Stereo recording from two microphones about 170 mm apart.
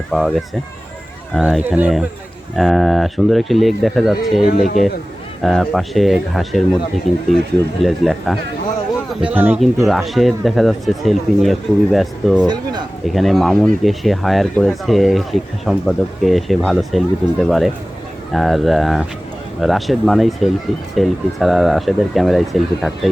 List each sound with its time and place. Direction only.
0.1 s speech: centre (ahead or behind)
4.4 s speech: 50° left (ahead or behind)
5.4 s speech: centre (ahead or behind)
7.8 s speech: centre (ahead or behind)
9.2 s speech: 10° right (ahead or behind)
9.6 s speech: centre (ahead or behind)